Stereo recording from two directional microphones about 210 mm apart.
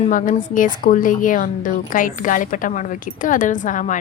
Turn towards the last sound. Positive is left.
turn(degrees=35)  # may be behind; listen again after turning